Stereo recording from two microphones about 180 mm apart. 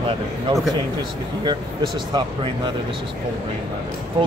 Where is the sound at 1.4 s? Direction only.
25° right (ahead or behind).